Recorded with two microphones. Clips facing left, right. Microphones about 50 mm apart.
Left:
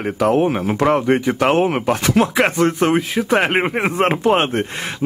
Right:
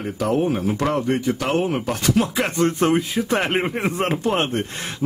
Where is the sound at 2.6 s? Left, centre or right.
Left.